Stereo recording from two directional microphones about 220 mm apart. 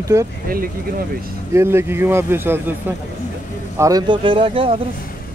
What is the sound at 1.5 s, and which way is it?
A man's voice, 10° right (ahead or behind).